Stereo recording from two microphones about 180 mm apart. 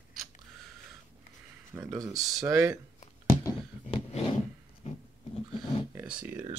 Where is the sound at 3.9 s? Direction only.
35° left (ahead or behind).